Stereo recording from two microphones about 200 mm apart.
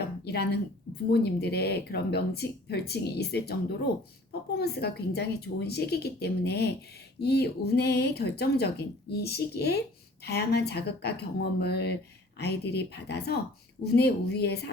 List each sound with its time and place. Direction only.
0.3 s speech: 55° left (ahead or behind)